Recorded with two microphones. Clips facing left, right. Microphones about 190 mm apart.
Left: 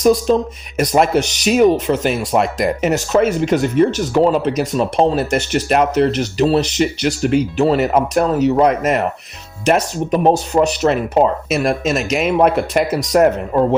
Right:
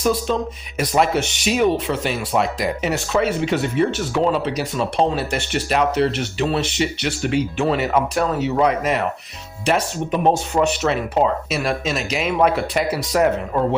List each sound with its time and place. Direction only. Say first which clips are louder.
0.0 s speech: left 7 dB; 40° left (ahead or behind)